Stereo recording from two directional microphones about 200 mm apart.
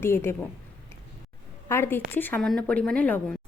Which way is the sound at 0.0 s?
10° left (ahead or behind).